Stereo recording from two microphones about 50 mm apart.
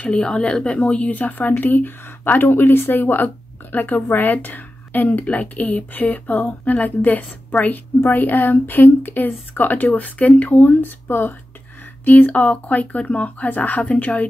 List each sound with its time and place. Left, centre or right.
0.0 s speech: centre; by 5.2 s left
5.2 s speech: left